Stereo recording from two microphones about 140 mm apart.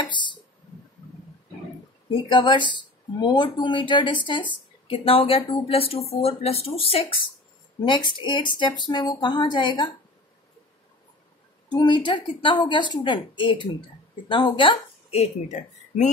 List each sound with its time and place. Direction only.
0.0 s a sound: 35° left (ahead or behind)
2.0 s speech: 35° left (ahead or behind)
11.7 s a woman's voice: 35° left (ahead or behind); by 16.1 s 55° left (ahead or behind)